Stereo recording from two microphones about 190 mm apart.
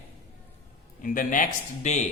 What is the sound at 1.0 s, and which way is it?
A man's voice, 45° left (ahead or behind).